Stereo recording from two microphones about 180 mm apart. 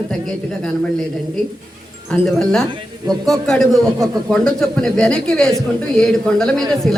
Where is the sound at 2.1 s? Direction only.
Centre (ahead or behind).